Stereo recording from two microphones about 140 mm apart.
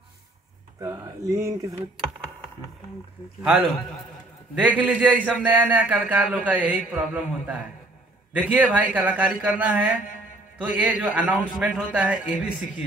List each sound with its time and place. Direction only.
0.7 s speech: 20° right (ahead or behind)
4.6 s speech: 10° right (ahead or behind)